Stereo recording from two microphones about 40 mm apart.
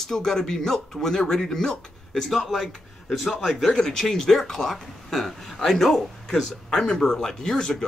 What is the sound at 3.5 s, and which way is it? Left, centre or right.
A man's voice, centre.